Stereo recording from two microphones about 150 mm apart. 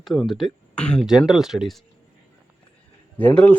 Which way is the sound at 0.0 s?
Centre (ahead or behind).